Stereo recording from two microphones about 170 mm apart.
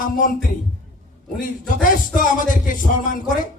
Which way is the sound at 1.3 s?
50° left (ahead or behind).